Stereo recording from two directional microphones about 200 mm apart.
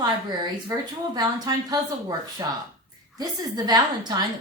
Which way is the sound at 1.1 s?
20° right (ahead or behind).